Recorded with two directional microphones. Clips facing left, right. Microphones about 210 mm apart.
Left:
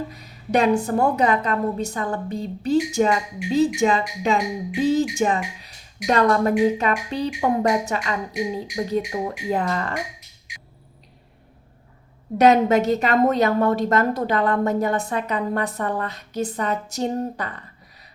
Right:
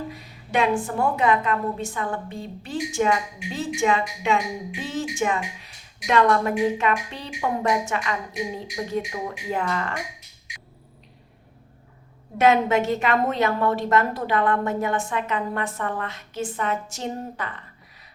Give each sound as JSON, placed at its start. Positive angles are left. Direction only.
{"t": 0.1, "sound": "a woman's voice", "side_deg": 40}
{"t": 12.4, "sound": "a woman's voice", "side_deg": 40}